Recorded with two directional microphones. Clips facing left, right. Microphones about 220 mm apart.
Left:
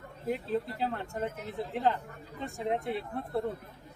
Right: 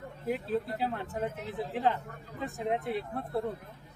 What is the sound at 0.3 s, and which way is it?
Speech, centre (ahead or behind).